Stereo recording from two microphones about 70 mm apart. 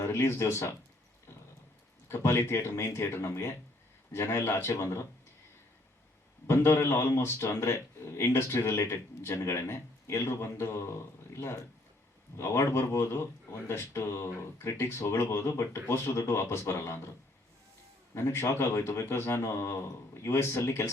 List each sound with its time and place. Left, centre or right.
0.0 s speech: left
2.0 s a man's voice: left
6.5 s a man's voice: left
18.1 s a man's voice: left